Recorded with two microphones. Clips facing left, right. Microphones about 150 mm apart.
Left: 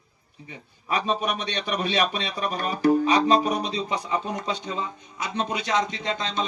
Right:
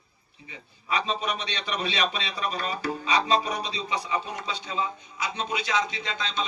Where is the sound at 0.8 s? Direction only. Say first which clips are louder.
Left 3 dB; 50° left (ahead or behind).